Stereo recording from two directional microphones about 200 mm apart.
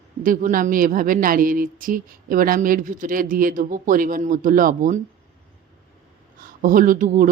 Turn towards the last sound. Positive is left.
turn(degrees=-40)  # may be behind; listen again after turning